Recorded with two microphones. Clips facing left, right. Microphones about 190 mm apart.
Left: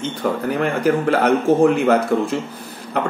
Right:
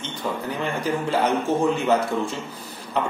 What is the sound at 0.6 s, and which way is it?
A man's voice, 65° left (ahead or behind).